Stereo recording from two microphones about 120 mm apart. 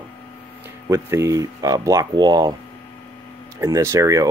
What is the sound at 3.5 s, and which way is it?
Speech, 25° right (ahead or behind).